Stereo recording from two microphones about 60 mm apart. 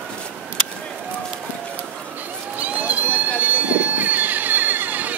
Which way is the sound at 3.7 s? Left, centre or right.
Right.